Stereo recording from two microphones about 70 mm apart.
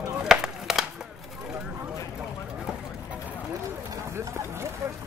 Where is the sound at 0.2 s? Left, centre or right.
Centre.